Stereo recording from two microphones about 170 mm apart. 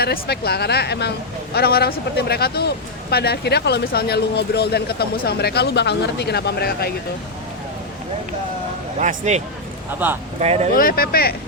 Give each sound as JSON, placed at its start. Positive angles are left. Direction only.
{"t": 0.0, "sound": "speech", "side_deg": 65}
{"t": 9.0, "sound": "a man's voice", "side_deg": -45}
{"t": 10.0, "sound": "speech", "side_deg": -10}
{"t": 10.4, "sound": "speech", "side_deg": -40}
{"t": 10.8, "sound": "speech", "side_deg": 60}